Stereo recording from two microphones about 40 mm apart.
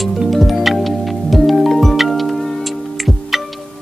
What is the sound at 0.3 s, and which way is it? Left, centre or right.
Music, centre.